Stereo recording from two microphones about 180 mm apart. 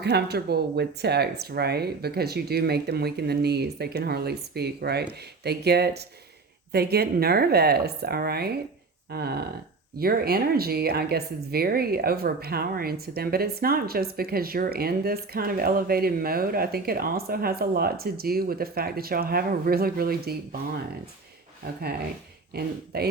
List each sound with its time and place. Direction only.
0.0 s speech: 65° right (ahead or behind)
22.5 s speech: 60° right (ahead or behind)